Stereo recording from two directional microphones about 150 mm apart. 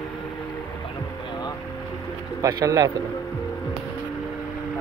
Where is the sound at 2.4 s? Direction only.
20° right (ahead or behind).